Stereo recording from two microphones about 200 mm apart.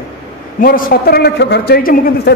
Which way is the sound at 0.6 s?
45° left (ahead or behind).